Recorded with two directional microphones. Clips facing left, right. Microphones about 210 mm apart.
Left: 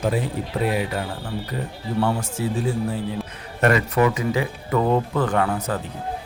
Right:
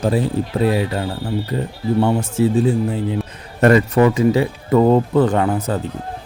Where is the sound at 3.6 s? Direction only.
35° right (ahead or behind).